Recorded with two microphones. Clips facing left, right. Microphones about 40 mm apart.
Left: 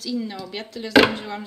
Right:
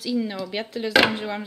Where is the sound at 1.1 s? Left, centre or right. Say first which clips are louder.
Right 2 dB; centre.